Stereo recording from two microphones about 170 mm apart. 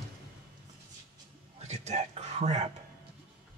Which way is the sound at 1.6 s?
40° right (ahead or behind).